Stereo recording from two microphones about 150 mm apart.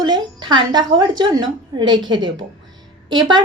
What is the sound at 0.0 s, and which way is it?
A woman's voice, 30° right (ahead or behind).